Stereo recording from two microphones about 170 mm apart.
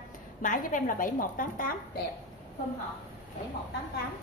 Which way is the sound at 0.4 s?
50° left (ahead or behind).